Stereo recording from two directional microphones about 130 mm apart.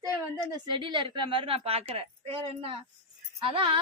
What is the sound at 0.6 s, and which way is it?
A woman's voice, 40° right (ahead or behind).